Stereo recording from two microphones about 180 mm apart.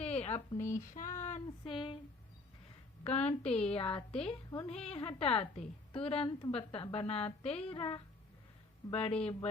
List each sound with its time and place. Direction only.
0.0 s a sound: 35° left (ahead or behind)
0.9 s speech: 45° left (ahead or behind)
1.7 s speech: 25° left (ahead or behind)
3.0 s a woman's voice: 35° left (ahead or behind)